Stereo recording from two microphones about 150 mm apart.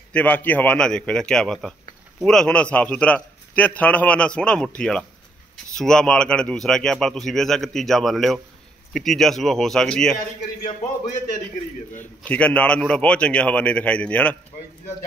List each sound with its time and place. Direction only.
0.1 s a man's voice: 10° left (ahead or behind)
10.1 s a man's voice: 55° left (ahead or behind)
12.3 s a man's voice: 10° left (ahead or behind)